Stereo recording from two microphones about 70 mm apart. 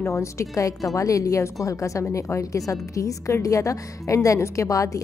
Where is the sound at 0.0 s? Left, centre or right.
Left.